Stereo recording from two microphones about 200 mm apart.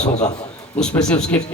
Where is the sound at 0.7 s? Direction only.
5° left (ahead or behind).